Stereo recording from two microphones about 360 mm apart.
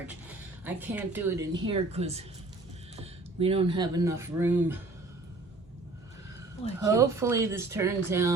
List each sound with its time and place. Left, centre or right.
0.6 s speech: centre
1.6 s speech: centre
6.8 s speech: centre